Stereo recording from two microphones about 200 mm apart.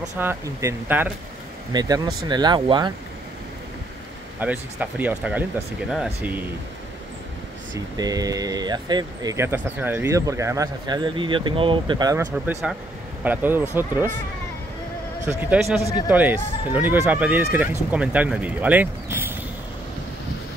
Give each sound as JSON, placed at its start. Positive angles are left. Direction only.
{"t": 0.2, "sound": "speech", "side_deg": -15}
{"t": 1.7, "sound": "speech", "side_deg": -20}
{"t": 4.4, "sound": "speech", "side_deg": -5}
{"t": 7.7, "sound": "speech", "side_deg": -20}
{"t": 12.2, "sound": "speech", "side_deg": -10}
{"t": 15.2, "sound": "speech", "side_deg": -5}